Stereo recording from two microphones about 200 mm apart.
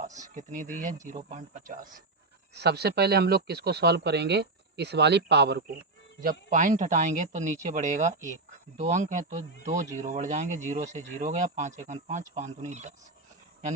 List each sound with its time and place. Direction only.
0.3 s speech: 40° right (ahead or behind)
2.6 s speech: 55° right (ahead or behind)
6.5 s speech: 40° right (ahead or behind)